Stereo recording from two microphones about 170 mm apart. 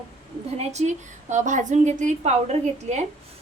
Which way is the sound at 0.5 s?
40° right (ahead or behind).